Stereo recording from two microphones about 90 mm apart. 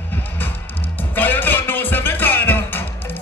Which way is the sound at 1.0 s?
20° left (ahead or behind).